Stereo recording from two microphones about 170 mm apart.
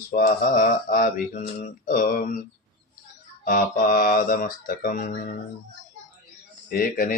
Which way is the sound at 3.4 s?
55° left (ahead or behind).